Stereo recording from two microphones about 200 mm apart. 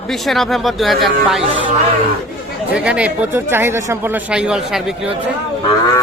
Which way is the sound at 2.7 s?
5° right (ahead or behind).